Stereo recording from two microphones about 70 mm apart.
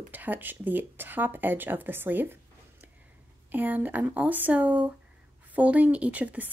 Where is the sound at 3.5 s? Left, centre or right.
Right.